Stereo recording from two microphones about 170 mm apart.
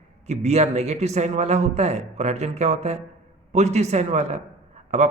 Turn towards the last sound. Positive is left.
turn(degrees=-40)  # may be behind; listen again after turning